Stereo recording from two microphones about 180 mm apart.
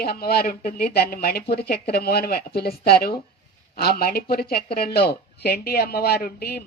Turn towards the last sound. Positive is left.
turn(degrees=60)  # may be behind; listen again after turning